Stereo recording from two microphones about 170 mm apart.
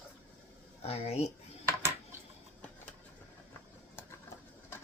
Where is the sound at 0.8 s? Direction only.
35° left (ahead or behind).